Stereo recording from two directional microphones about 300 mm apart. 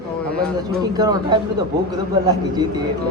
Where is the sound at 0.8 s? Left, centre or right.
Centre.